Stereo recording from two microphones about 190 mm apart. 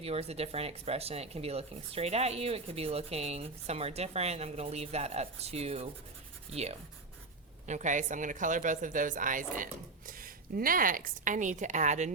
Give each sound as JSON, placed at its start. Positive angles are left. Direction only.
{"t": 0.0, "sound": "a woman's voice", "side_deg": -30}